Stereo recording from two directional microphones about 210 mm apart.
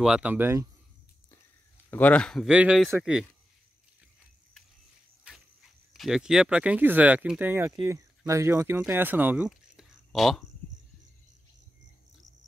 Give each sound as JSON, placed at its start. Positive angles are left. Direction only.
{"t": 0.0, "sound": "speech", "side_deg": -5}
{"t": 1.9, "sound": "speech", "side_deg": 10}
{"t": 5.3, "sound": "cricket", "side_deg": -5}
{"t": 5.9, "sound": "speech", "side_deg": 0}